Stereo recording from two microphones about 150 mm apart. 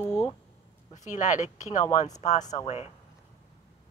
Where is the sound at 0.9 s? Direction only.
55° left (ahead or behind).